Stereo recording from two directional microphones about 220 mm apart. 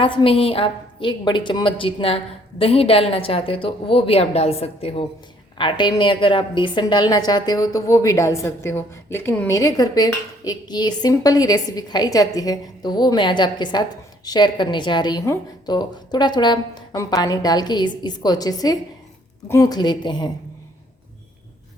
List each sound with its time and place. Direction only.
0.0 s a woman's voice: 25° left (ahead or behind)